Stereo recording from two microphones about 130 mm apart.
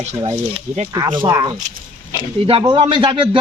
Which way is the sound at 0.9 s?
35° right (ahead or behind).